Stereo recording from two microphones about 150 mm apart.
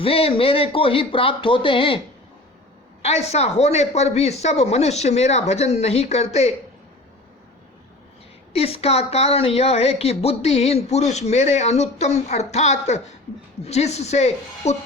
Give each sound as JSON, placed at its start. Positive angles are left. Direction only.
{"t": 0.0, "sound": "speech", "side_deg": 40}
{"t": 3.0, "sound": "speech", "side_deg": 45}
{"t": 8.5, "sound": "speech", "side_deg": 40}